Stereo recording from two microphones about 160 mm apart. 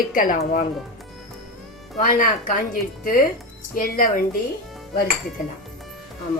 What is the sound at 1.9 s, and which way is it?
A woman's voice, 55° left (ahead or behind).